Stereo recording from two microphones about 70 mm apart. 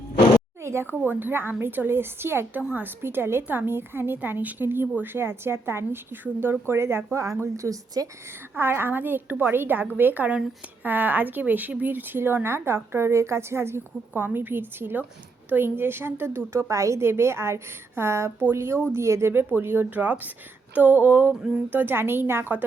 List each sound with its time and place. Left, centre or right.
0.6 s a woman's voice: right
1.0 s a woman's voice: right
8.5 s a woman's voice: right
19.3 s a woman's voice: right